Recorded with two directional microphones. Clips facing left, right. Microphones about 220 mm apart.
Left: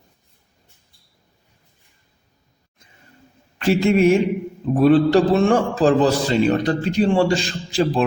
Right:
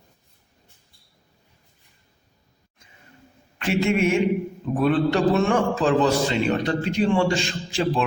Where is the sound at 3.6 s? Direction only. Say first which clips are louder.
Left 5 dB; 35° left (ahead or behind).